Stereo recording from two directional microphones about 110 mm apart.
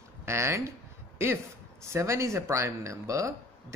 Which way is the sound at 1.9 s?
25° right (ahead or behind).